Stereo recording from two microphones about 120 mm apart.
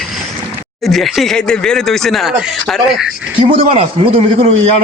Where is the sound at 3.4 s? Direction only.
50° right (ahead or behind).